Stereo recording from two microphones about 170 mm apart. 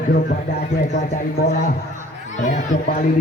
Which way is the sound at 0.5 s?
45° left (ahead or behind).